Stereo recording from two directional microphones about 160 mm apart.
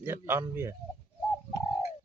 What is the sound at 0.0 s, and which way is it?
Speech, 15° right (ahead or behind).